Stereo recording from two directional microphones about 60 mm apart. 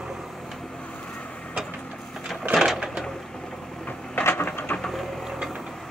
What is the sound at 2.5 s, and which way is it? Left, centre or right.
Printer, centre.